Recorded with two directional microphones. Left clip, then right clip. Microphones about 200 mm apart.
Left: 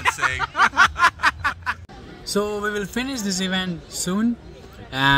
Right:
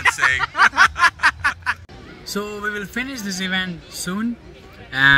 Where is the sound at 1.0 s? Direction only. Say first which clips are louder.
Right 2 dB; 5° right (ahead or behind).